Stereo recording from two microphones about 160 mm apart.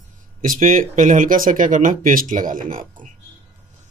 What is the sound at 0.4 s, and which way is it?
Speech, 55° right (ahead or behind).